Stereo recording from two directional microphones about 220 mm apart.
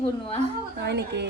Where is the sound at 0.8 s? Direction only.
50° right (ahead or behind).